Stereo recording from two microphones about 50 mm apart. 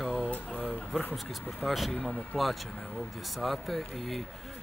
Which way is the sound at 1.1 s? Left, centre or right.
Centre.